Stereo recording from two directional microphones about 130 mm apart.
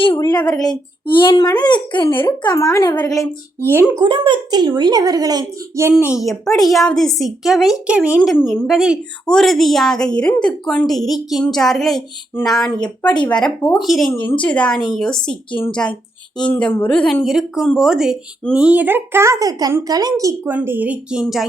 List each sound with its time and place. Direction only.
0.2 s a woman's voice: 30° left (ahead or behind)
0.4 s a woman's voice: 5° left (ahead or behind)
0.7 s speech: 40° left (ahead or behind)
2.6 s a woman's voice: 25° left (ahead or behind)
3.7 s a woman's voice: 15° right (ahead or behind)
4.0 s a child's voice: 35° right (ahead or behind)
6.2 s a woman's voice: centre (ahead or behind); by 20.5 s 25° right (ahead or behind)
20.5 s a woman's voice: 15° right (ahead or behind)